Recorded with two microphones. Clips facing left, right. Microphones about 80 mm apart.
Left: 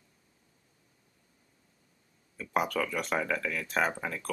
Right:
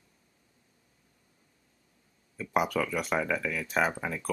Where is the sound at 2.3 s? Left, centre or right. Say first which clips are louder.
Right 2 dB; centre.